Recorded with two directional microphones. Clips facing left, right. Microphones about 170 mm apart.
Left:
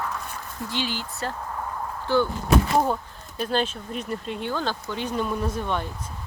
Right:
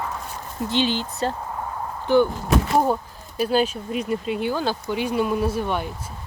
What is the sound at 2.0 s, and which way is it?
Speech, 15° right (ahead or behind).